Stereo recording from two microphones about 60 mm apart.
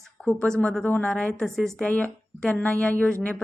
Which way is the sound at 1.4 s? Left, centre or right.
Centre.